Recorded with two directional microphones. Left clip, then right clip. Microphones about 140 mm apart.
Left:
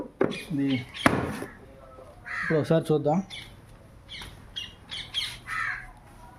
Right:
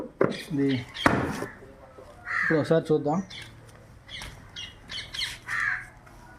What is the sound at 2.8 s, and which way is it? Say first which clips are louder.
Speech: even; 70° left (ahead or behind).